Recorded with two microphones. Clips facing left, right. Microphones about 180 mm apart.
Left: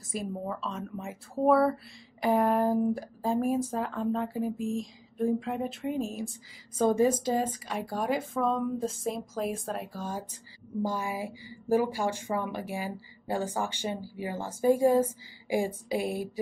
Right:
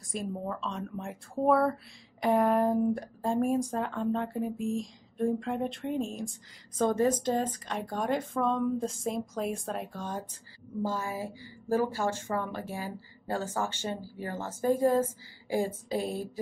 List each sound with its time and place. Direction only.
0.1 s a woman's voice: centre (ahead or behind)